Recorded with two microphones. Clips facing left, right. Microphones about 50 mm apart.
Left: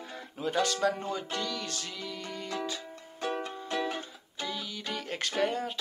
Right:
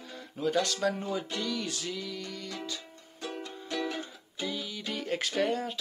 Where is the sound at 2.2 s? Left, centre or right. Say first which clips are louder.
Left 2 dB; centre.